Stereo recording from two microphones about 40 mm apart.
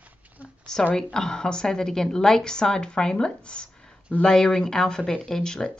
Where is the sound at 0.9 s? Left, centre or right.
Centre.